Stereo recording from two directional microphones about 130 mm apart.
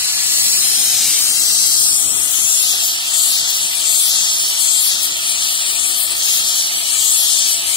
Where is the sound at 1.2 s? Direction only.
25° left (ahead or behind).